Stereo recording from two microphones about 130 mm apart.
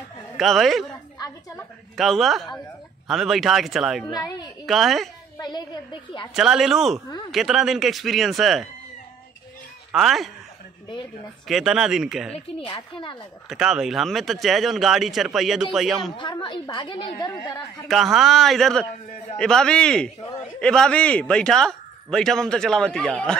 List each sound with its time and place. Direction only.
0.4 s a man's voice: centre (ahead or behind)
2.0 s a man's voice: centre (ahead or behind)
4.1 s a woman's voice: 30° left (ahead or behind)
4.6 s a man's voice: centre (ahead or behind)
6.3 s a man's voice: 5° right (ahead or behind)
9.9 s a man's voice: centre (ahead or behind)
11.4 s a man's voice: 5° right (ahead or behind)
12.3 s a woman's voice: 45° left (ahead or behind)
13.5 s a man's voice: 5° right (ahead or behind)
16.2 s a woman's voice: 35° left (ahead or behind)
17.8 s a man's voice: centre (ahead or behind)